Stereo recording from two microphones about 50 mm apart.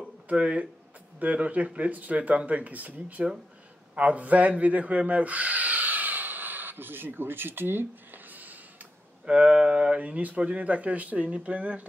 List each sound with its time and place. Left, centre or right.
0.3 s speech: right
9.2 s speech: right